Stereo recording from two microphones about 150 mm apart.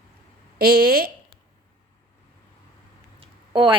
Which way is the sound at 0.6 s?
90° right.